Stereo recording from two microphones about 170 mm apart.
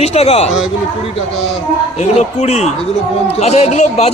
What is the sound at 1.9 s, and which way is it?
Speech, 40° left (ahead or behind).